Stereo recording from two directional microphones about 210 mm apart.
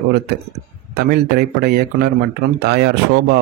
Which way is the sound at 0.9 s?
50° right (ahead or behind).